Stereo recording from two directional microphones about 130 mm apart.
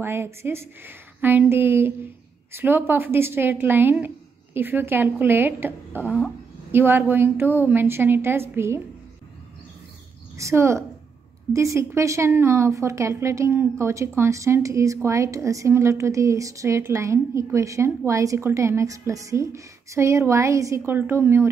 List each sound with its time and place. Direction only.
0.0 s a woman's voice: 20° right (ahead or behind)
10.3 s a woman's voice: 20° right (ahead or behind)